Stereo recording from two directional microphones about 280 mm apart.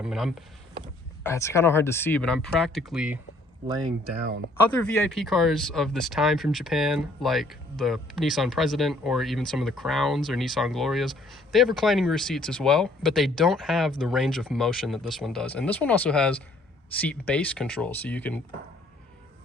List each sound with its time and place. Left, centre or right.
0.0 s speech: centre
1.2 s speech: centre
4.8 s speech: centre